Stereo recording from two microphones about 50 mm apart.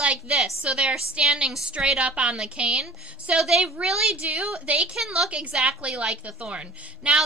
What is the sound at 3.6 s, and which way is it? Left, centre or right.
Speech, right.